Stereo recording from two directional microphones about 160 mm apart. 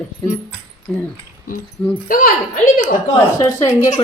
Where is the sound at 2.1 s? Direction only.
60° left (ahead or behind).